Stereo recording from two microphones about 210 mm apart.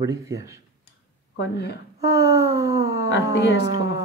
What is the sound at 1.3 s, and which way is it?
Speech, 55° left (ahead or behind).